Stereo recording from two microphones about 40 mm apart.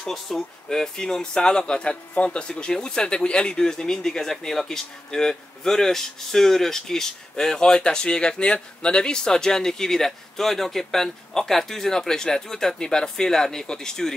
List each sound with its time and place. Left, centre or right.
0.0 s speech: centre